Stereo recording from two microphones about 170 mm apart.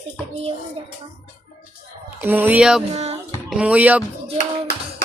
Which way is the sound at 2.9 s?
40° right (ahead or behind).